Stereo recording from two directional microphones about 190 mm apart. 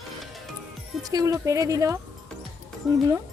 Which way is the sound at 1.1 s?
15° right (ahead or behind).